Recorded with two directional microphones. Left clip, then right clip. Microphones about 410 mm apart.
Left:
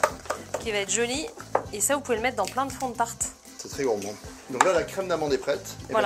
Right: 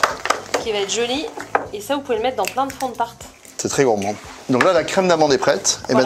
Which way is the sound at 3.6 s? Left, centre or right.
Right.